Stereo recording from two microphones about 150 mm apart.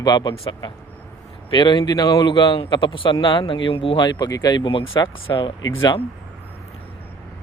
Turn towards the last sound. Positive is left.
turn(degrees=35)  # may be behind; listen again after turning